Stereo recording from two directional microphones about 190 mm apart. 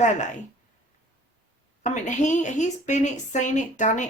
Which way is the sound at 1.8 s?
40° left (ahead or behind).